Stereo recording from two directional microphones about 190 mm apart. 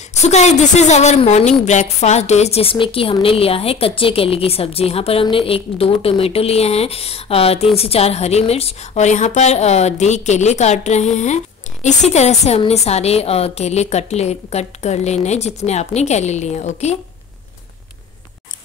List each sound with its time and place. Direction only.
0.1 s a woman's voice: 35° left (ahead or behind)